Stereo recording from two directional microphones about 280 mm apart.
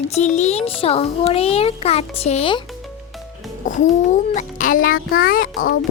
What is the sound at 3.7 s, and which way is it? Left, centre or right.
A child's voice, left.